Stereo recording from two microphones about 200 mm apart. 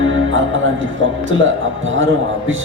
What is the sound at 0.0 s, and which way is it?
Speech, 75° right (ahead or behind).